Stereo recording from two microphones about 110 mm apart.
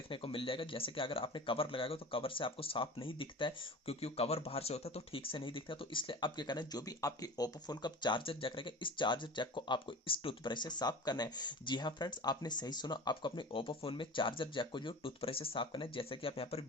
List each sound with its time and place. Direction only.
0.1 s speech: 50° left (ahead or behind)